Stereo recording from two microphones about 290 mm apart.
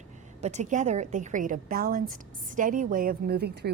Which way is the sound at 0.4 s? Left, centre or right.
Right.